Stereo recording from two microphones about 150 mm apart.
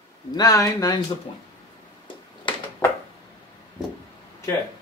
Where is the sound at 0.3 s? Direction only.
25° left (ahead or behind).